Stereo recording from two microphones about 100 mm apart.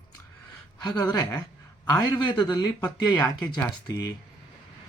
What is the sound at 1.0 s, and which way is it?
Speech, 25° left (ahead or behind).